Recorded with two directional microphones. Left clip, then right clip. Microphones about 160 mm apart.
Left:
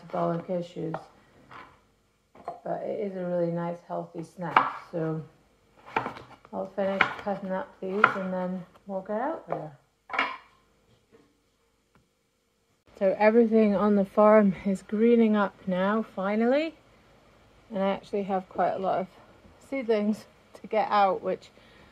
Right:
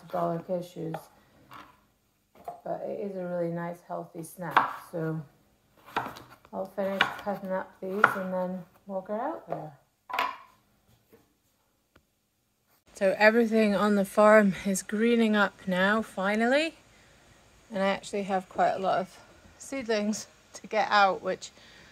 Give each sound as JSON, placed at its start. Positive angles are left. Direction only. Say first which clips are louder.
{"t": 0.1, "sound": "speech", "louder": "left 1 dB", "side_deg": -20}
{"t": 2.6, "sound": "speech", "louder": "left 3 dB", "side_deg": -20}
{"t": 6.5, "sound": "speech", "louder": "left 2 dB", "side_deg": -25}
{"t": 12.9, "sound": "speech", "louder": "left 1 dB", "side_deg": 5}